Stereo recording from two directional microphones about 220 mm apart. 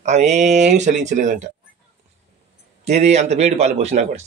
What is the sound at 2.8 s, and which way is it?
Speech, 30° right (ahead or behind).